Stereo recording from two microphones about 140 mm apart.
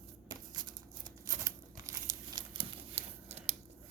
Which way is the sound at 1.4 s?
25° right (ahead or behind).